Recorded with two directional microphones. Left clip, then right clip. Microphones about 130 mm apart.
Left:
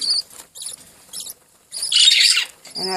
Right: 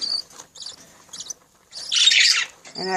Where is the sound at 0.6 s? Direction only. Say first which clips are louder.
Left 1 dB; 25° right (ahead or behind).